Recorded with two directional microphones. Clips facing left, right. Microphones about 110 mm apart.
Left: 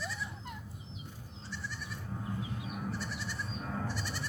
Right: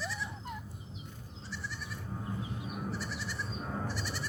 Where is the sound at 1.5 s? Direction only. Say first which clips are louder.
Even; centre (ahead or behind).